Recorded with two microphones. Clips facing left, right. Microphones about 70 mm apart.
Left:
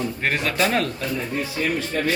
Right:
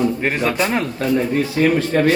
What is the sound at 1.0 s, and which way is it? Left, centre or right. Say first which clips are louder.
A man's voice: right 8 dB; right.